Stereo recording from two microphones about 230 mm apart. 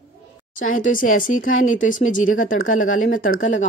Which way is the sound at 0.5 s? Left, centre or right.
Left.